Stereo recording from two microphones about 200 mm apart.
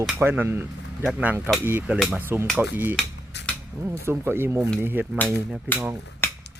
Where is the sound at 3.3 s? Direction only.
60° left (ahead or behind).